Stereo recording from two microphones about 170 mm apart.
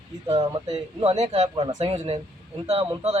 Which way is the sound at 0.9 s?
30° right (ahead or behind).